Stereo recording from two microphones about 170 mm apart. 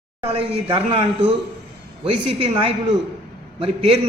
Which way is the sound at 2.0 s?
35° right (ahead or behind).